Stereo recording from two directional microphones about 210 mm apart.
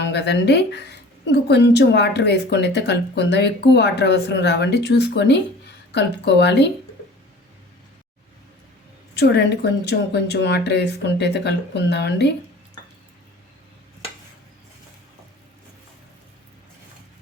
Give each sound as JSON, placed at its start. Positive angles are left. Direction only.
{"t": 0.1, "sound": "a woman's voice", "side_deg": 55}
{"t": 9.1, "sound": "a woman's voice", "side_deg": 50}